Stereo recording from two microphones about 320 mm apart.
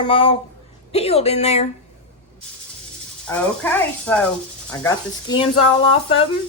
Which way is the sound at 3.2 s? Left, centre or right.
Centre.